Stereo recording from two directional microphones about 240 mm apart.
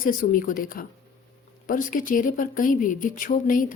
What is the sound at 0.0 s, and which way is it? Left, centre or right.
Speech, left.